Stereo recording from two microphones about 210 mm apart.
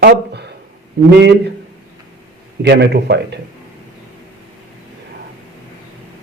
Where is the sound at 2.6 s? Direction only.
55° right (ahead or behind).